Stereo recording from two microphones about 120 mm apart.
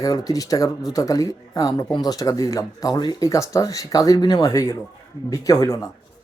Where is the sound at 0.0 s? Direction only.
30° left (ahead or behind).